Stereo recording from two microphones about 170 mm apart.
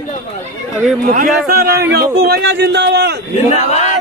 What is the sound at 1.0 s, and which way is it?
A man's voice, 60° right (ahead or behind).